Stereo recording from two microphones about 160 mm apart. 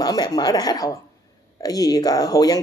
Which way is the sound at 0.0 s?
25° left (ahead or behind).